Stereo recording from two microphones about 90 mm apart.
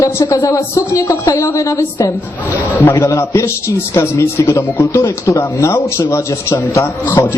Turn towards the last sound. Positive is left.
turn(degrees=35)  # may be behind; listen again after turning